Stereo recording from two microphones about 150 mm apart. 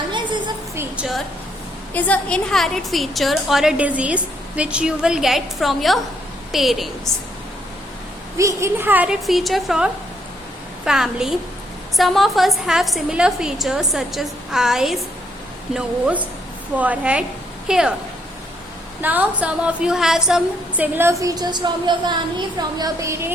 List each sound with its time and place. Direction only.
0.1 s a sound: 30° right (ahead or behind)
0.8 s a sound: 5° right (ahead or behind)
1.9 s a woman's voice: 10° left (ahead or behind)
8.4 s a woman's voice: 20° right (ahead or behind)
9.2 s a woman's voice: centre (ahead or behind)
19.0 s a woman's voice: 10° right (ahead or behind)